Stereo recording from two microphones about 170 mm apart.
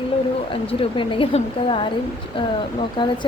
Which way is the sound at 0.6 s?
30° left (ahead or behind).